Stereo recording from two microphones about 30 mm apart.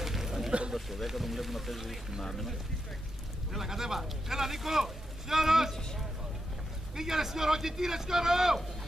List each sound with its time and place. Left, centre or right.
0.0 s a sound: centre
0.7 s speech: centre
3.5 s speech: centre
7.0 s speech: centre